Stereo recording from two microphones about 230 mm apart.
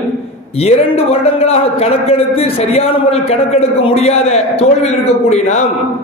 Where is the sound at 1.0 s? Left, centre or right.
Left.